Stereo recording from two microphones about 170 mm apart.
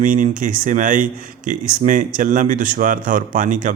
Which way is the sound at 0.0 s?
50° right (ahead or behind).